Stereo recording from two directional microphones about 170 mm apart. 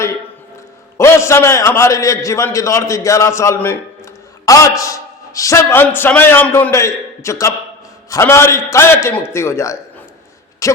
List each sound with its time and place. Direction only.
0.9 s a man's voice: 15° left (ahead or behind)